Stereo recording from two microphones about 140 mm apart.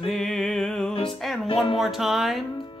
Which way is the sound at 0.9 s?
40° left (ahead or behind).